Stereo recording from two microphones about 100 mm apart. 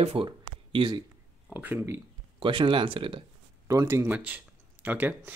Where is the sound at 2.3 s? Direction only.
55° right (ahead or behind).